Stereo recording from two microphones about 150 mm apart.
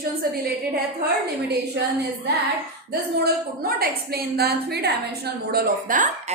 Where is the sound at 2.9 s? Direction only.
90° right.